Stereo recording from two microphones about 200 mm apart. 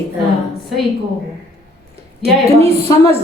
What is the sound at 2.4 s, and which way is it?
Speech, 15° left (ahead or behind).